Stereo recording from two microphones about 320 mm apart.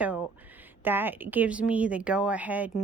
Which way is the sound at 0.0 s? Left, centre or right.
Centre.